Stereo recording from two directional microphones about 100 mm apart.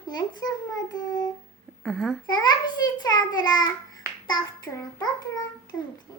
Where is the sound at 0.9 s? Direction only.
40° left (ahead or behind).